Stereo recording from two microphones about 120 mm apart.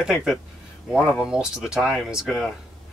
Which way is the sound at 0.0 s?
5° right (ahead or behind).